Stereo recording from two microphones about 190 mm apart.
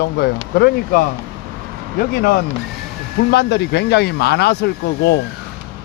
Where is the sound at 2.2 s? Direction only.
55° left (ahead or behind).